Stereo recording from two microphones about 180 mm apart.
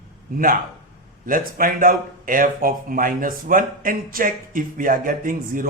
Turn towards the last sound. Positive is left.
turn(degrees=-50)  # may be behind; listen again after turning